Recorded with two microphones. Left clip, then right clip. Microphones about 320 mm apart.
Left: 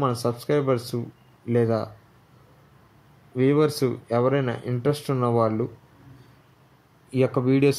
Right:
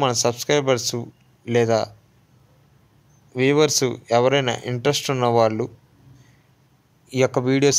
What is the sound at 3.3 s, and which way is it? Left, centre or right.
Speech, right.